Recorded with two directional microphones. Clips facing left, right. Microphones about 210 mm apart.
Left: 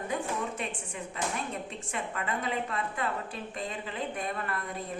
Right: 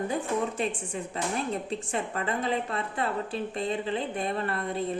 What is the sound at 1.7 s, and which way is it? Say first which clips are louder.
A woman's voice: right 6 dB; 35° right (ahead or behind).